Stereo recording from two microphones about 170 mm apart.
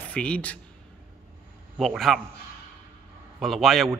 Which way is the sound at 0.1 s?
5° left (ahead or behind).